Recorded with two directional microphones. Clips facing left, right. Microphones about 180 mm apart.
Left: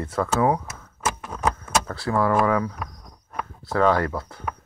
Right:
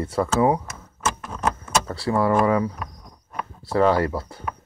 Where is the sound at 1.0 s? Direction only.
10° left (ahead or behind).